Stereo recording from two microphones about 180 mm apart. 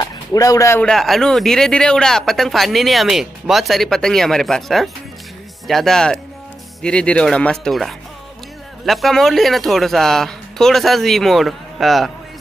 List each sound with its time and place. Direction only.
0.0 s speech: 20° left (ahead or behind)
0.8 s a man's voice: centre (ahead or behind)